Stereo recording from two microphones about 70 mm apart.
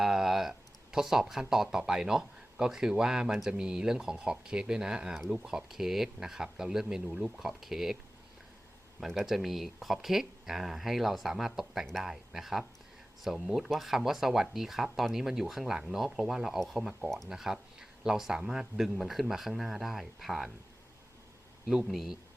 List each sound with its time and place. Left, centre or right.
0.0 s speech: centre
9.0 s speech: centre
21.8 s speech: centre